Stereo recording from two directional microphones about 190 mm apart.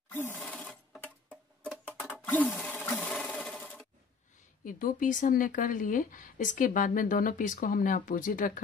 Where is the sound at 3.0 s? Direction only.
Centre (ahead or behind).